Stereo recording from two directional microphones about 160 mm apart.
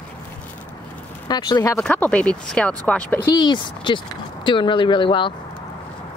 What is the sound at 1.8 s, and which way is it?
Speech, 5° left (ahead or behind).